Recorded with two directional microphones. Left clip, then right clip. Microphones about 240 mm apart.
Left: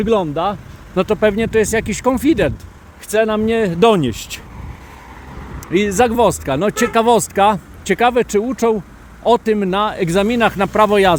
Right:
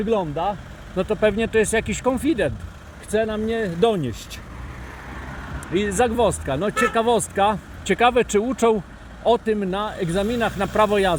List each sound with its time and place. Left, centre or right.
0.0 s speech: left
3.1 s speech: left
5.7 s speech: left
9.2 s speech: left